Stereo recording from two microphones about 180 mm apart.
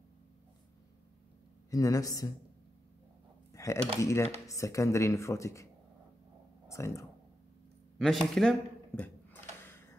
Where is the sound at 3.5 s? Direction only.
15° left (ahead or behind).